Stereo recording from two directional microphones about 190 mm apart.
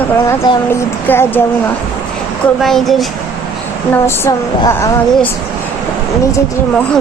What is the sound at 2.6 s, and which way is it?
Speech, centre (ahead or behind).